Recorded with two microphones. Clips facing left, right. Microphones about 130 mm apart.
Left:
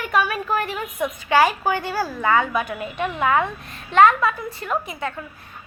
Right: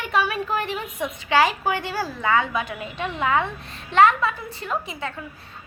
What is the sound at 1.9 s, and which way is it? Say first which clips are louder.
A woman's voice: left 3 dB; 35° left (ahead or behind).